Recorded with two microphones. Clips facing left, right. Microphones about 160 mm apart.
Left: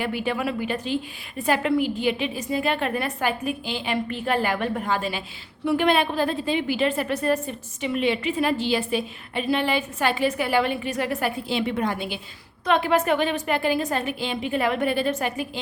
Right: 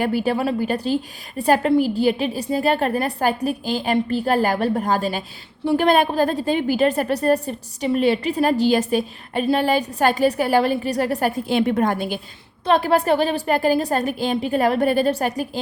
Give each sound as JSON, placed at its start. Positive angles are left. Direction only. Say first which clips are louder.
{"t": 0.0, "sound": "a woman's voice", "louder": "right 5 dB", "side_deg": -40}